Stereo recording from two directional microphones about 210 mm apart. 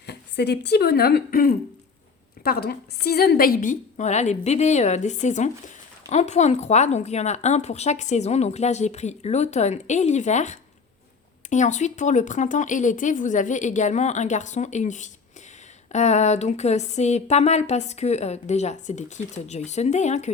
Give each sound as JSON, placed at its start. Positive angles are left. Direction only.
{"t": 0.0, "sound": "speech", "side_deg": 50}